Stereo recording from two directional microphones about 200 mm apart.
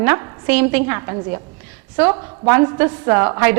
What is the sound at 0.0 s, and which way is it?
A woman's voice, 10° right (ahead or behind).